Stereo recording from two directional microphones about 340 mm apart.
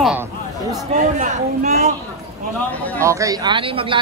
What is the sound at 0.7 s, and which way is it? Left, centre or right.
A man's voice, right.